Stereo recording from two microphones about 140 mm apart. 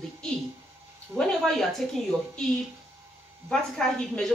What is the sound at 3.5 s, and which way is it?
Speech, 5° left (ahead or behind).